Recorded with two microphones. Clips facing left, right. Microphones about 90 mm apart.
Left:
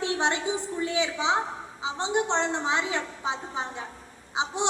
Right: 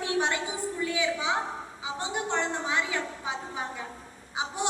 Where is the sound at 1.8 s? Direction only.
20° left (ahead or behind).